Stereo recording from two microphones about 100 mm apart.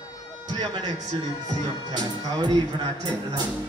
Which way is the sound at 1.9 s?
50° right (ahead or behind).